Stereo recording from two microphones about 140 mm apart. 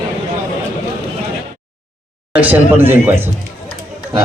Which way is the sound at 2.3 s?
10° right (ahead or behind).